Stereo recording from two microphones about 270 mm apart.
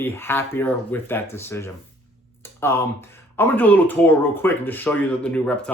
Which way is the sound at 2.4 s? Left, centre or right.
Centre.